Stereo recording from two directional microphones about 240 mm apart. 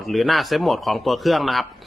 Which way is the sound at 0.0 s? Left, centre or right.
Centre.